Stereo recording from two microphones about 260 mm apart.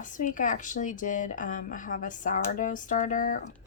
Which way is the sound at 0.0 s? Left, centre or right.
Left.